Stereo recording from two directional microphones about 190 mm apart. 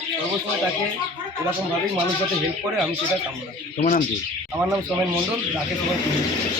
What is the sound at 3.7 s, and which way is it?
Speech, 50° left (ahead or behind).